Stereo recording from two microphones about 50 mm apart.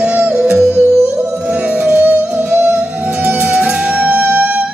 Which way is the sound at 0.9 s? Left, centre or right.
Right.